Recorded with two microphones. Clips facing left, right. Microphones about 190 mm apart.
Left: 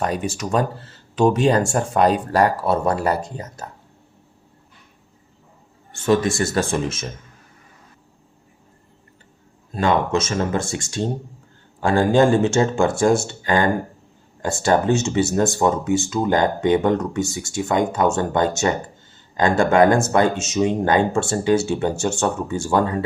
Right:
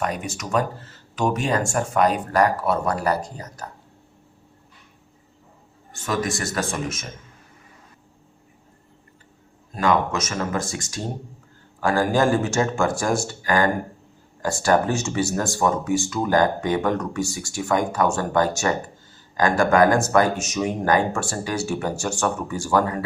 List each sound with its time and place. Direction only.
0.0 s speech: 30° left (ahead or behind)
5.9 s speech: 30° left (ahead or behind)
9.7 s speech: 30° left (ahead or behind)